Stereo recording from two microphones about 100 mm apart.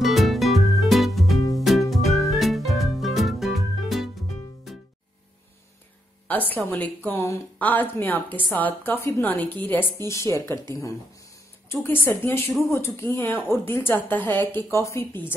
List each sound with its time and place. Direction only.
0.0 s music: centre (ahead or behind)
6.5 s a woman's voice: 15° left (ahead or behind)
7.2 s a woman's voice: 30° left (ahead or behind)
7.5 s a woman's voice: 15° left (ahead or behind)
11.7 s a woman's voice: 20° left (ahead or behind)